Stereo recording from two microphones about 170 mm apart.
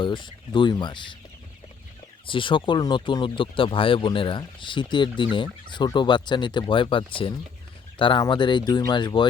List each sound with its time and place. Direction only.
0.0 s speech: 25° left (ahead or behind)
2.2 s speech: 30° left (ahead or behind)